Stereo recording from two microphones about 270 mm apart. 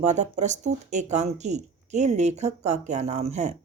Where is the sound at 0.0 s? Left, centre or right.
Right.